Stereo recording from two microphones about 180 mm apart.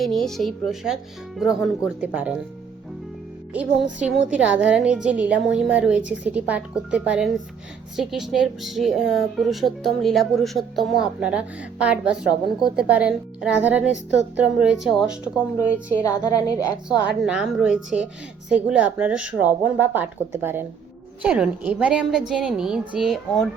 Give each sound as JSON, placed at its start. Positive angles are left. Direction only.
{"t": 0.0, "sound": "a woman's voice", "side_deg": 0}
{"t": 3.9, "sound": "a woman's voice", "side_deg": -5}
{"t": 16.0, "sound": "a woman's voice", "side_deg": 20}
{"t": 17.2, "sound": "a woman's voice", "side_deg": -5}